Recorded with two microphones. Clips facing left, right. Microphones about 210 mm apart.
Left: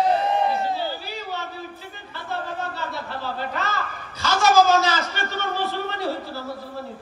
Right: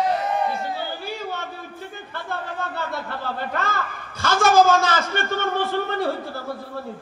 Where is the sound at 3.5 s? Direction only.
50° right (ahead or behind).